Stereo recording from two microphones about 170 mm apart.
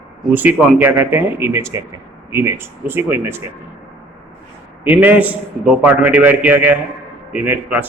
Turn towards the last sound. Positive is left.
turn(degrees=-10)  # may be behind; listen again after turning